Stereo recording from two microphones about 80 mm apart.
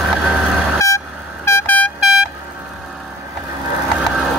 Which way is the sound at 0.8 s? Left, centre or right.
Left.